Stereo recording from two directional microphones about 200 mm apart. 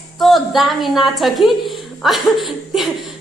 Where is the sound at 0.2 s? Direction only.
Centre (ahead or behind).